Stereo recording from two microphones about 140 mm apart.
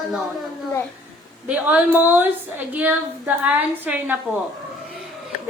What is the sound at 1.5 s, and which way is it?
A woman's voice, 10° right (ahead or behind).